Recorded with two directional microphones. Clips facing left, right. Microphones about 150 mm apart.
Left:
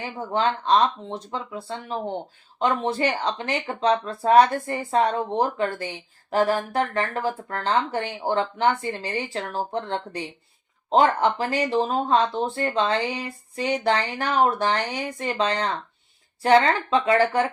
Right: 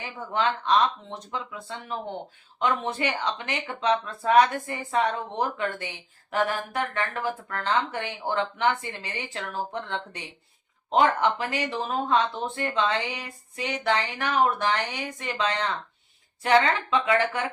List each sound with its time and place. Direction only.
0.3 s speech: 35° left (ahead or behind)